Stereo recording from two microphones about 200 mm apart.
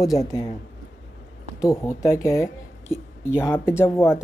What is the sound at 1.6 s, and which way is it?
Speech, 15° left (ahead or behind).